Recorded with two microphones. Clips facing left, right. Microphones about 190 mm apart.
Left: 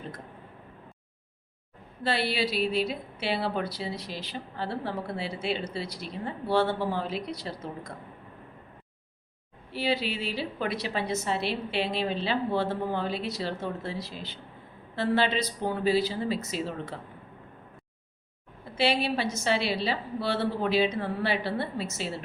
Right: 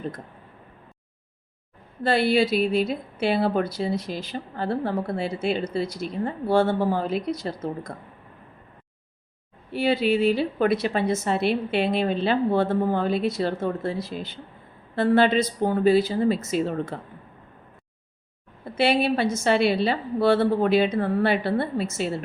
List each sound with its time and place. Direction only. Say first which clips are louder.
2.0 s a woman's voice: right 8 dB; 50° right (ahead or behind)
9.7 s a woman's voice: right 8 dB; 50° right (ahead or behind)
18.8 s a woman's voice: right 5 dB; 55° right (ahead or behind)